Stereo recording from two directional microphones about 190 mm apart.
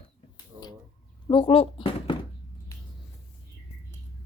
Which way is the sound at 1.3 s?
25° left (ahead or behind).